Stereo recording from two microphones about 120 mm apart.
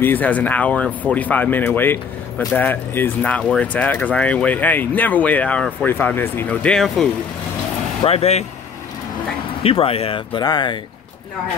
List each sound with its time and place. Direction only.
0.0 s speech: 15° left (ahead or behind)
8.0 s speech: 60° left (ahead or behind)
9.6 s speech: 55° left (ahead or behind)